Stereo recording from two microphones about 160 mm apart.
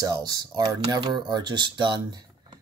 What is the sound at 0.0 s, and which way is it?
Speech, 25° right (ahead or behind).